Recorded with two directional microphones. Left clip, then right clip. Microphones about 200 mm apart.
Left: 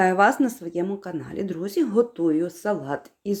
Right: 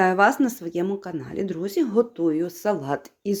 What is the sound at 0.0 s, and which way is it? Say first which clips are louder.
Speech: even; 10° right (ahead or behind).